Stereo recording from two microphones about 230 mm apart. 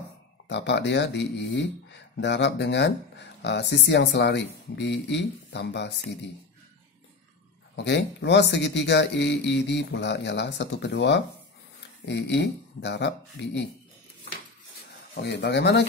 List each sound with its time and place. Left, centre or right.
0.5 s speech: left
7.7 s speech: left
15.1 s speech: left